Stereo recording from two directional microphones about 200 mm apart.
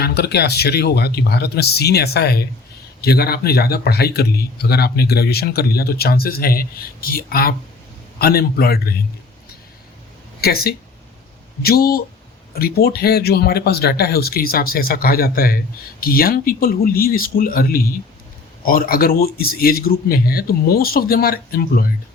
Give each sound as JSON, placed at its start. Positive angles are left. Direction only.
{"t": 0.0, "sound": "speech", "side_deg": 55}
{"t": 10.4, "sound": "speech", "side_deg": 50}